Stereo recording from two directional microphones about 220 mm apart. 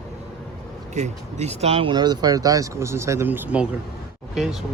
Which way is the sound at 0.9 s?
30° right (ahead or behind).